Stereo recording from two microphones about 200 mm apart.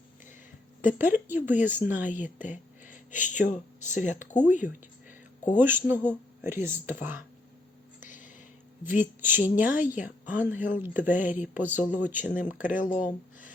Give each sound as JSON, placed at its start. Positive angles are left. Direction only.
{"t": 0.8, "sound": "a woman's voice", "side_deg": -10}
{"t": 3.2, "sound": "speech", "side_deg": 40}
{"t": 5.5, "sound": "a woman's voice", "side_deg": -10}
{"t": 8.0, "sound": "a sound", "side_deg": 40}
{"t": 8.9, "sound": "a woman's voice", "side_deg": -10}
{"t": 12.5, "sound": "speech", "side_deg": 40}